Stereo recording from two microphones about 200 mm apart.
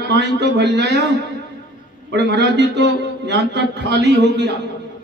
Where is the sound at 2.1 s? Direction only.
60° right (ahead or behind).